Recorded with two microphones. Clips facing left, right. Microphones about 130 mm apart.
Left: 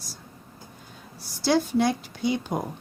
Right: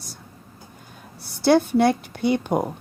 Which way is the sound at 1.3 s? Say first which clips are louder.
Right 5 dB; 60° right (ahead or behind).